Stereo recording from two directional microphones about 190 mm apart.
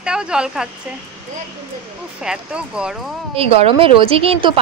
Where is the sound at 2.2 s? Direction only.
5° right (ahead or behind).